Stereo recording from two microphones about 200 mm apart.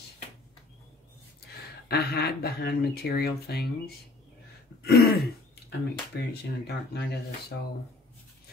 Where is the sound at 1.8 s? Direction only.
55° left (ahead or behind).